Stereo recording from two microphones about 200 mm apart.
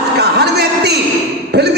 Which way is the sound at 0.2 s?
55° right (ahead or behind).